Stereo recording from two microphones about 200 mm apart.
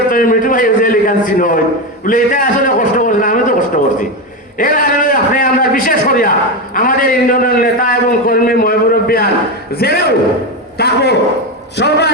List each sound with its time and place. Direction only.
0.1 s a man's voice: 45° left (ahead or behind)
4.5 s a man's voice: 40° left (ahead or behind)